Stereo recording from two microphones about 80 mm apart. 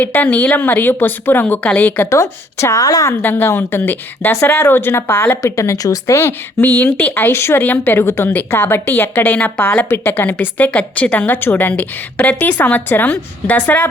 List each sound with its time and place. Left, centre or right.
0.0 s speech: left
2.0 s a woman's voice: left
3.2 s speech: left
5.4 s speech: left
6.6 s speech: left